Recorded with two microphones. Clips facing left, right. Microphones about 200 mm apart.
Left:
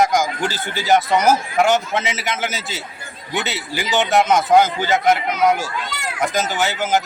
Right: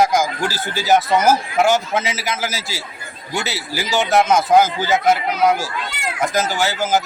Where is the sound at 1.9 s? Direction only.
Centre (ahead or behind).